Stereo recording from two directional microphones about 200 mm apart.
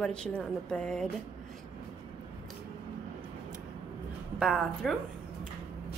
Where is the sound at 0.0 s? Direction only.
5° left (ahead or behind).